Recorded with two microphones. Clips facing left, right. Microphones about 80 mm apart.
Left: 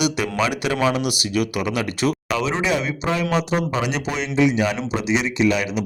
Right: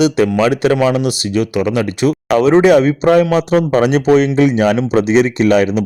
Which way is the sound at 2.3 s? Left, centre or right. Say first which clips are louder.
Right 12 dB; right.